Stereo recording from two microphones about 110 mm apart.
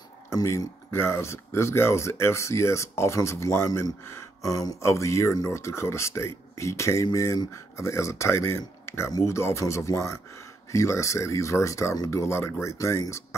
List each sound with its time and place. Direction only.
0.3 s speech: 30° left (ahead or behind)